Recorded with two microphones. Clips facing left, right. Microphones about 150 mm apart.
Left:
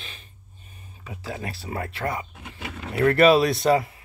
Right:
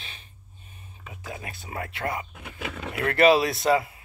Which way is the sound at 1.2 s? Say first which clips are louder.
Left 5 dB; 35° left (ahead or behind).